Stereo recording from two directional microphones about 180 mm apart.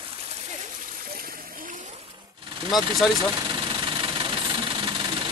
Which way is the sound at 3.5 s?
25° right (ahead or behind).